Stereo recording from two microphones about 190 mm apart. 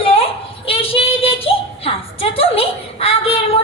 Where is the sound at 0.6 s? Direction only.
30° left (ahead or behind).